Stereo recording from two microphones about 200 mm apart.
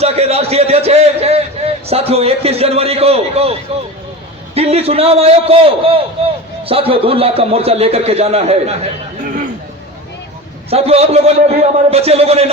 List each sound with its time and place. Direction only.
0.0 s a man's voice: 30° right (ahead or behind)
10.7 s a man's voice: 30° right (ahead or behind)